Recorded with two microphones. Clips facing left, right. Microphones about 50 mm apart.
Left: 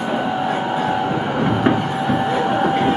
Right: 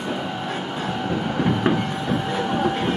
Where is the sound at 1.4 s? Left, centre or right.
Centre.